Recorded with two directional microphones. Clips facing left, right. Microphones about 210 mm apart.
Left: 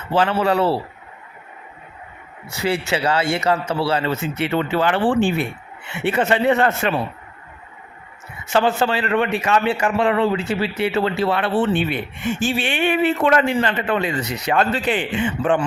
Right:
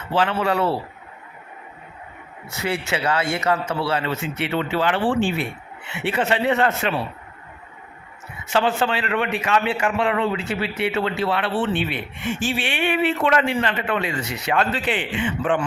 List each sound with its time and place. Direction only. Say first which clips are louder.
0.1 s a man's voice: left 3 dB; 40° left (ahead or behind)
2.6 s a man's voice: left 3 dB; 35° left (ahead or behind)
8.5 s a man's voice: left 2 dB; 40° left (ahead or behind)